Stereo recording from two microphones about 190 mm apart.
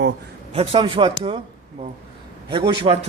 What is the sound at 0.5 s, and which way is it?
Speech, 30° right (ahead or behind).